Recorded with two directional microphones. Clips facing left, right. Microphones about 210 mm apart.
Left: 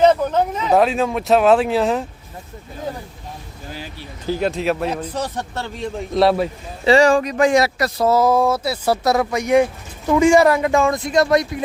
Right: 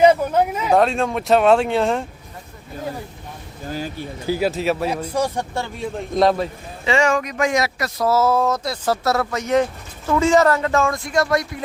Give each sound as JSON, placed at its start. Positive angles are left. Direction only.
{"t": 0.0, "sound": "a sound", "side_deg": -10}
{"t": 0.7, "sound": "speech", "side_deg": 5}
{"t": 3.7, "sound": "speech", "side_deg": -45}
{"t": 4.3, "sound": "speech", "side_deg": -5}
{"t": 6.1, "sound": "speech", "side_deg": 10}
{"t": 6.8, "sound": "speech", "side_deg": 35}
{"t": 8.0, "sound": "speech", "side_deg": 15}